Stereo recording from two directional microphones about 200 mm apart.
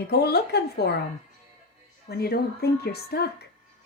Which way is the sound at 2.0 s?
50° left (ahead or behind).